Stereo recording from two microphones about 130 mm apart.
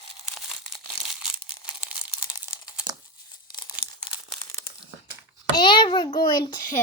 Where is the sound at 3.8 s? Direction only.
90° right.